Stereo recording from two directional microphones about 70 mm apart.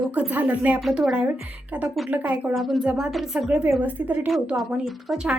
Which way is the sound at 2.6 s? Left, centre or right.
Centre.